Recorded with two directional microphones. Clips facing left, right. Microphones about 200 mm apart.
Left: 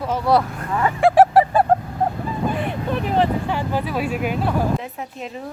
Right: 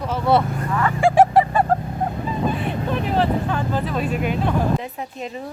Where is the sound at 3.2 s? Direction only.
15° left (ahead or behind).